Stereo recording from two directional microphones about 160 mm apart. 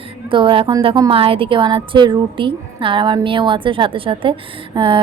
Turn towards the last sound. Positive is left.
turn(degrees=-30)  # may be behind; listen again after turning